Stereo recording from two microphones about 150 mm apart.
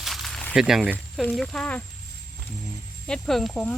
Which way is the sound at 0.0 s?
Centre (ahead or behind).